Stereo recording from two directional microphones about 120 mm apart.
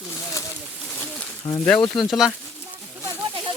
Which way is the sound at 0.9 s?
10° left (ahead or behind).